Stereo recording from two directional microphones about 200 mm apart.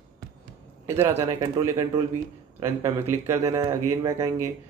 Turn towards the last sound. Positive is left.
turn(degrees=-15)  # may be behind; listen again after turning